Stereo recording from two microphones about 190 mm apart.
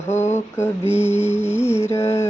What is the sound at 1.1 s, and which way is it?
Music, 15° left (ahead or behind).